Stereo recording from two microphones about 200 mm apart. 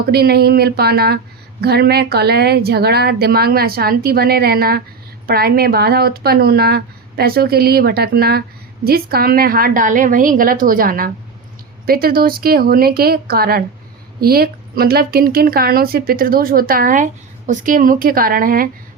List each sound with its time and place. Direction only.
0.1 s speech: 50° right (ahead or behind)